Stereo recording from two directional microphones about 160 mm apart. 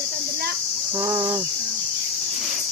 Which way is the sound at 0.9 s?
15° right (ahead or behind).